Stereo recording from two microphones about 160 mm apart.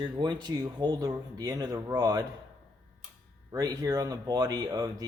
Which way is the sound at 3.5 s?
20° right (ahead or behind).